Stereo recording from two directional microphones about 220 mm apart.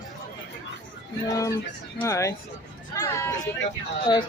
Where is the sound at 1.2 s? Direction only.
15° left (ahead or behind).